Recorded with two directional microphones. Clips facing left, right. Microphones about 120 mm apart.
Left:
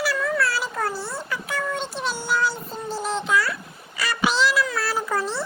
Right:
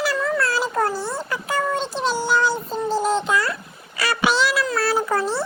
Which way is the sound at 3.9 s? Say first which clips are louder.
Right 3 dB; 70° right (ahead or behind).